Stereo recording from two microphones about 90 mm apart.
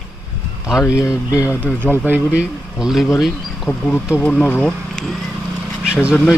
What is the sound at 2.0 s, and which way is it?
Speech, 15° right (ahead or behind).